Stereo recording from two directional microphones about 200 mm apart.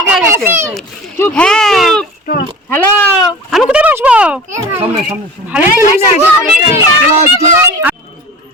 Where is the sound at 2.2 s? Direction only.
45° left (ahead or behind).